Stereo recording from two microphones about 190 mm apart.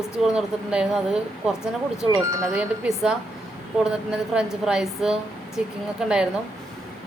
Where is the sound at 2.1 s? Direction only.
15° right (ahead or behind).